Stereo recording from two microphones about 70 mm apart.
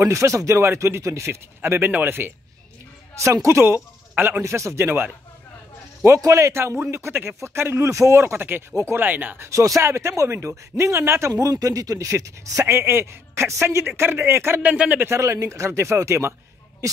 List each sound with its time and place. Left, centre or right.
0.0 s a man's voice: right
3.4 s a man's voice: right
6.0 s a man's voice: right
9.4 s speech: right
11.3 s a man's voice: right
14.6 s speech: centre
15.1 s speech: right